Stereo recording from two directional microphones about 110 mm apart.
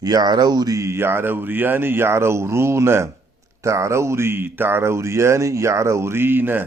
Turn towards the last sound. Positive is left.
turn(degrees=-20)  # may be behind; listen again after turning